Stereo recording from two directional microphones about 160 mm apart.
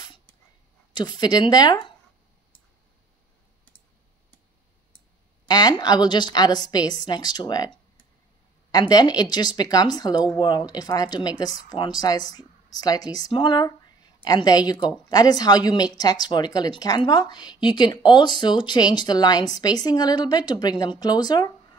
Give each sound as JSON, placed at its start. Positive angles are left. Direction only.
{"t": 0.9, "sound": "speech", "side_deg": 25}
{"t": 5.5, "sound": "speech", "side_deg": 25}
{"t": 8.7, "sound": "speech", "side_deg": 25}